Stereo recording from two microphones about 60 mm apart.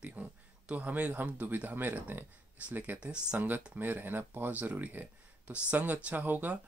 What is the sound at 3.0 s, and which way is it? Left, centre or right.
Speech, centre.